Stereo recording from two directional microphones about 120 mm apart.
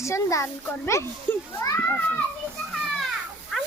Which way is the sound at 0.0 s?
25° left (ahead or behind).